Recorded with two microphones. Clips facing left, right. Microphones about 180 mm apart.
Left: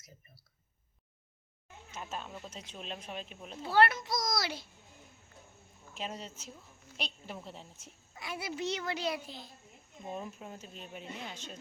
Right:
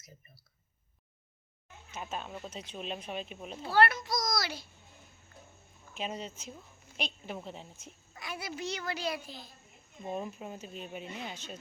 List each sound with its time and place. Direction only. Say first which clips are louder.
2.0 s speech: right 3 dB; 10° right (ahead or behind)
3.8 s a child's voice: even; 20° left (ahead or behind)
5.9 s speech: right 3 dB; centre (ahead or behind)
8.1 s a child's voice: left 1 dB; 25° left (ahead or behind)
10.1 s speech: right 4 dB; 5° right (ahead or behind)